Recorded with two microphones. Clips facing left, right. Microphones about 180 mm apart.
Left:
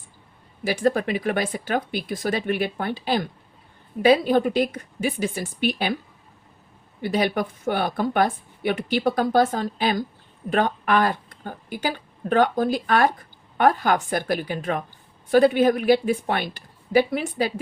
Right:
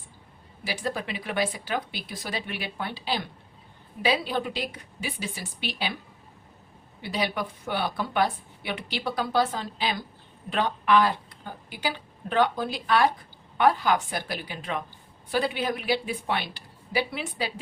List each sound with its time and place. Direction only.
0.6 s a woman's voice: 50° left (ahead or behind)
7.0 s a woman's voice: 50° left (ahead or behind)